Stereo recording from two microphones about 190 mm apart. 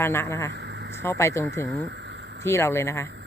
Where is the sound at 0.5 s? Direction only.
65° right (ahead or behind).